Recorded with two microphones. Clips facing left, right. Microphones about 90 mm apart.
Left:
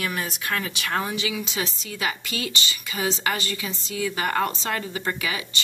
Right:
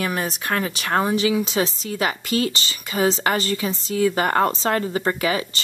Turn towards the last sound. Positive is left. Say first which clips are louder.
# right 6 dB
turn(degrees=-35)  # may be behind; listen again after turning